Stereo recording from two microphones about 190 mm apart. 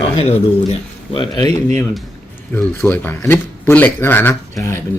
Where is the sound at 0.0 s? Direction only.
30° left (ahead or behind).